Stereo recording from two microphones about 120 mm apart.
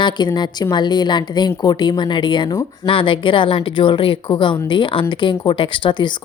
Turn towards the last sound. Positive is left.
turn(degrees=40)  # may be behind; listen again after turning